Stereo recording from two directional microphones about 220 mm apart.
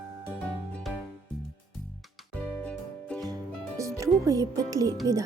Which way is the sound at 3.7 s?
15° right (ahead or behind).